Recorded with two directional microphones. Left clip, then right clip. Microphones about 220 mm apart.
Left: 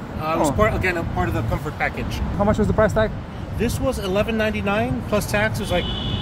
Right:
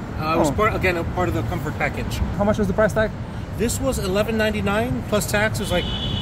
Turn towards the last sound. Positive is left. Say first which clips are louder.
# even
turn(degrees=-5)  # may be behind; listen again after turning